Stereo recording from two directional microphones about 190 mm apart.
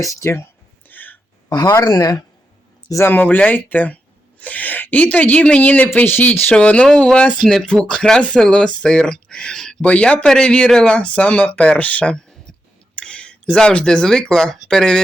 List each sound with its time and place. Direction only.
0.0 s speech: 15° left (ahead or behind)
0.9 s a sound: 10° left (ahead or behind)
1.5 s speech: 20° left (ahead or behind); by 15.0 s 5° left (ahead or behind)